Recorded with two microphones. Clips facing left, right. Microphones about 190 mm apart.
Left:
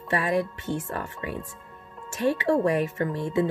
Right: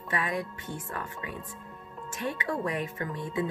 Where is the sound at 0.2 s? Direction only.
30° left (ahead or behind).